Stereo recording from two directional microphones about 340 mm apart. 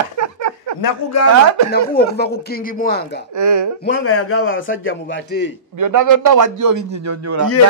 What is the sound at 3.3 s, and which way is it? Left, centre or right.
Speech, right.